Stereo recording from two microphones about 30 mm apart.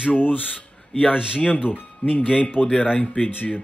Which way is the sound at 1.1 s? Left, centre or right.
Right.